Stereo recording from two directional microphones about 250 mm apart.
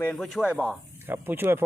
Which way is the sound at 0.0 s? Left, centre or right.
Centre.